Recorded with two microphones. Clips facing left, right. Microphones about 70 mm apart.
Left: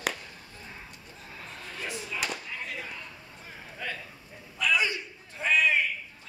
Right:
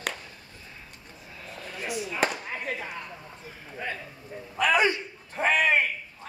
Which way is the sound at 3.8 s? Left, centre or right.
Right.